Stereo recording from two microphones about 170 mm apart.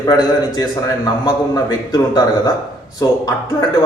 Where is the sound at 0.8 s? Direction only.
20° left (ahead or behind).